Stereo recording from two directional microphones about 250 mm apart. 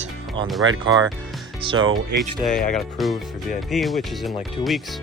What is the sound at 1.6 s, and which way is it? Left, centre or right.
Speech, right.